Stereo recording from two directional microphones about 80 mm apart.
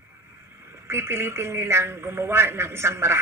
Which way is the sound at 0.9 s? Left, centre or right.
Right.